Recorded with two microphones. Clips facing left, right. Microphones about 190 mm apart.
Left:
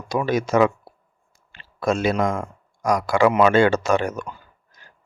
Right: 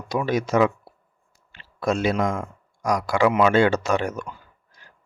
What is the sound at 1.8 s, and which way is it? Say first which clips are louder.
Speech: left 1 dB; 50° left (ahead or behind).